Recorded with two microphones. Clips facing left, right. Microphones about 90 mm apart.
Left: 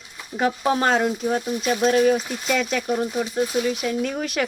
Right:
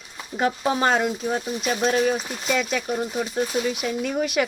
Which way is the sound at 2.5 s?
5° right (ahead or behind).